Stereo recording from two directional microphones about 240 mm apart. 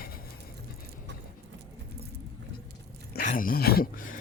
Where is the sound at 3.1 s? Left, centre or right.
Left.